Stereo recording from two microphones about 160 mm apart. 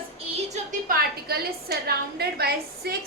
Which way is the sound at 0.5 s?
55° right (ahead or behind).